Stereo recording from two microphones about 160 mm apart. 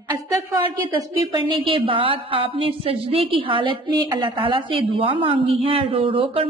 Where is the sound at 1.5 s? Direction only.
30° right (ahead or behind).